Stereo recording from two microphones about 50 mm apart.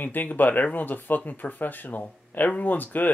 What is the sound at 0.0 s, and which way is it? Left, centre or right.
Speech, left.